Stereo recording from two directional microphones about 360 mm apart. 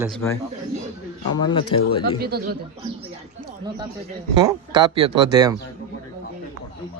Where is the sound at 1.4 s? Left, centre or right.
Centre.